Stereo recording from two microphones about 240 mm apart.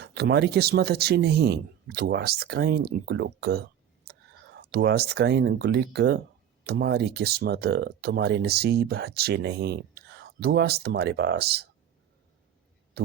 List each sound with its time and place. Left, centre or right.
0.0 s speech: right